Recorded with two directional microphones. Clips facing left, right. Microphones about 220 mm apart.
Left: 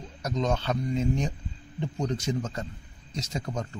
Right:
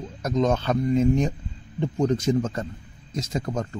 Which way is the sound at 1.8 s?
90° right.